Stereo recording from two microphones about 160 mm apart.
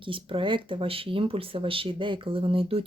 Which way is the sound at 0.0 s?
35° right (ahead or behind).